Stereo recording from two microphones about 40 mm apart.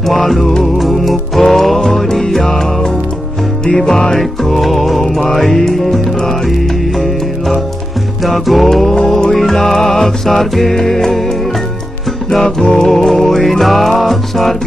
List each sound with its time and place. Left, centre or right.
0.0 s music: centre
8.2 s music: centre
12.3 s music: centre